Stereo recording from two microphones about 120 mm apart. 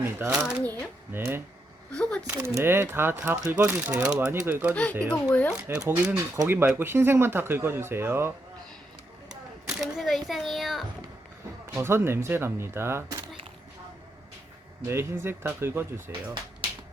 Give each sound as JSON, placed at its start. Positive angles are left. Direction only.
{"t": 0.3, "sound": "speech", "side_deg": -5}
{"t": 0.6, "sound": "speech", "side_deg": 15}
{"t": 1.1, "sound": "speech", "side_deg": -20}
{"t": 1.9, "sound": "a sound", "side_deg": 5}
{"t": 2.2, "sound": "speech", "side_deg": -20}
{"t": 4.7, "sound": "speech", "side_deg": 10}
{"t": 5.7, "sound": "speech", "side_deg": -20}
{"t": 9.3, "sound": "a sound", "side_deg": -5}
{"t": 11.7, "sound": "speech", "side_deg": -20}
{"t": 14.8, "sound": "speech", "side_deg": -20}